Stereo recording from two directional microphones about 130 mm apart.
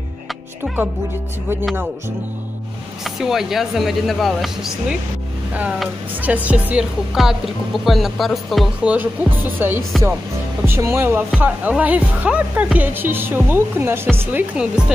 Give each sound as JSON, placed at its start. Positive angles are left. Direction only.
{"t": 3.0, "sound": "speech", "side_deg": -5}
{"t": 8.9, "sound": "speech", "side_deg": -15}